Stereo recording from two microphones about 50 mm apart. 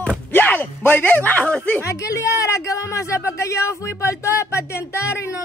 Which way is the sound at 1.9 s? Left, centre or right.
Left.